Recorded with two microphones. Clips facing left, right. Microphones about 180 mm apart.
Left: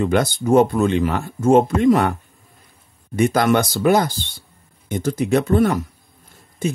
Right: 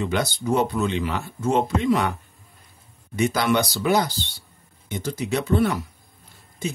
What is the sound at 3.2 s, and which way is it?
Speech, 50° left (ahead or behind).